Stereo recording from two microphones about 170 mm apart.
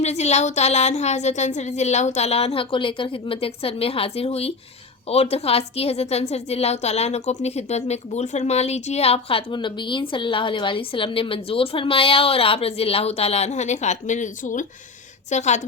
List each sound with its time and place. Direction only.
0.0 s a woman's voice: 40° left (ahead or behind)